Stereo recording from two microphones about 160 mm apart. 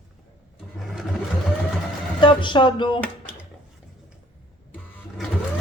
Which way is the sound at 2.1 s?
30° left (ahead or behind).